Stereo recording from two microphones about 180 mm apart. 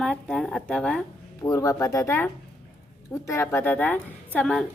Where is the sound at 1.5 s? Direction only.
15° left (ahead or behind).